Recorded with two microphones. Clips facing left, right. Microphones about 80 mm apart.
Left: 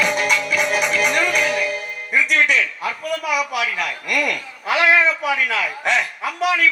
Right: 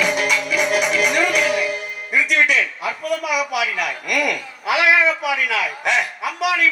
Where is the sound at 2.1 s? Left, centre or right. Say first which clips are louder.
Even; left.